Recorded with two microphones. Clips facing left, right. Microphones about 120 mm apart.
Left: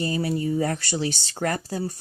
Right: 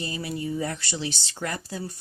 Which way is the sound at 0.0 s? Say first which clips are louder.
Left 6 dB; 40° left (ahead or behind).